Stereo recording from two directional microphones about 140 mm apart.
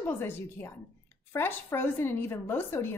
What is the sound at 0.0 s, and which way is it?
Speech, 15° left (ahead or behind).